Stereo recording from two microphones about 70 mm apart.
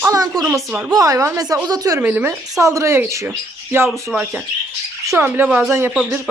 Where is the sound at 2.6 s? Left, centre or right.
Right.